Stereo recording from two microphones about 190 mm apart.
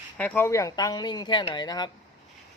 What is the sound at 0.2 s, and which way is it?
Speech, 10° left (ahead or behind).